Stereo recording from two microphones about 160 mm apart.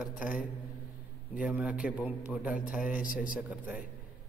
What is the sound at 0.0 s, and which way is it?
Speech, 5° right (ahead or behind).